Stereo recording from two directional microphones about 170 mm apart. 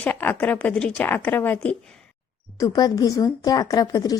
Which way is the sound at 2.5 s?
20° left (ahead or behind).